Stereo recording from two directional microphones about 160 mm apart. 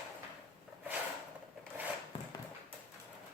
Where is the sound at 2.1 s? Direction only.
35° left (ahead or behind).